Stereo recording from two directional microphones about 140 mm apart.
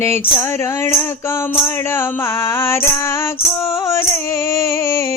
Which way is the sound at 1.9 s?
15° left (ahead or behind).